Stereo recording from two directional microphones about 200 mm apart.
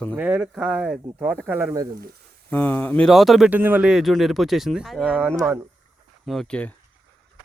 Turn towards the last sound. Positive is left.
turn(degrees=5)  # may be behind; listen again after turning